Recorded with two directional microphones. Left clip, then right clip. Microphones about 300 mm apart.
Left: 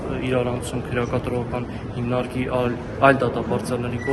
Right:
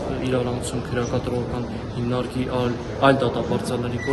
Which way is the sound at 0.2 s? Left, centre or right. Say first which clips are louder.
Left 2 dB; centre.